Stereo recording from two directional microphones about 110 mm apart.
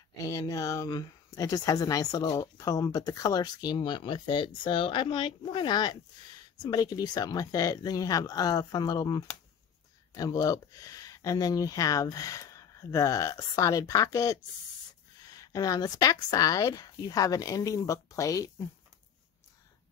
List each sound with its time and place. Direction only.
0.2 s speech: 30° left (ahead or behind)